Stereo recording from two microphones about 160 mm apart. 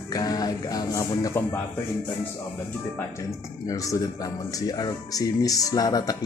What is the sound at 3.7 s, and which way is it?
Speech, 20° left (ahead or behind).